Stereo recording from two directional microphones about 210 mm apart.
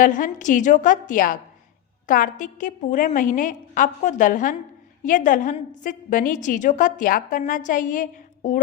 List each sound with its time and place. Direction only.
0.0 s a woman's voice: 40° left (ahead or behind)